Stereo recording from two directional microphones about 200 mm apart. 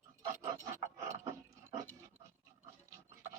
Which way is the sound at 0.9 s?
15° right (ahead or behind).